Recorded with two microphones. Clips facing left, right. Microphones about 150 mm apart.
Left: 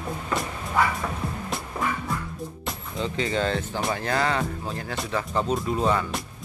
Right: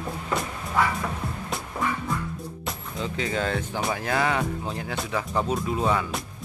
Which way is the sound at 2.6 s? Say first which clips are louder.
Left 1 dB; centre (ahead or behind).